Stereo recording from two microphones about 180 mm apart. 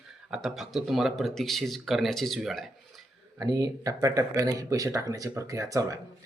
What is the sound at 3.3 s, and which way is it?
Speech, 20° right (ahead or behind).